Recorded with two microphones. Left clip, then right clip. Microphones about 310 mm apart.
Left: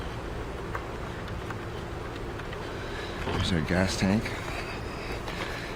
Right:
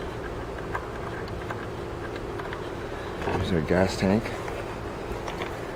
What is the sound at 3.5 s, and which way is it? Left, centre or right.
Speech, centre.